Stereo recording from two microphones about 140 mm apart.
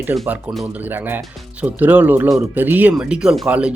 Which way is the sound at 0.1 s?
15° right (ahead or behind).